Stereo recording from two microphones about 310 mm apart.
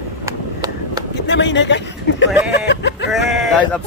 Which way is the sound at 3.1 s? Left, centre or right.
Centre.